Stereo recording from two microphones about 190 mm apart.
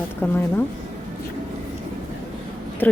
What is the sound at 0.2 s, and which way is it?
Speech, 10° left (ahead or behind).